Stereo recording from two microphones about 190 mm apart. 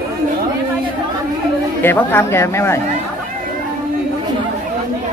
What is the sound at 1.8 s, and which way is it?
Speech, 10° left (ahead or behind).